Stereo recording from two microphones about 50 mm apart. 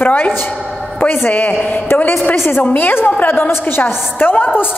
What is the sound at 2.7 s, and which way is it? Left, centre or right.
A woman's voice, left.